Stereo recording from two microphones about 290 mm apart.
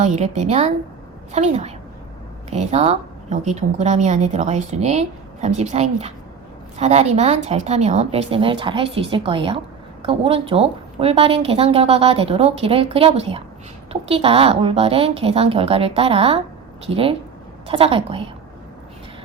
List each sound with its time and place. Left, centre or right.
0.0 s speech: right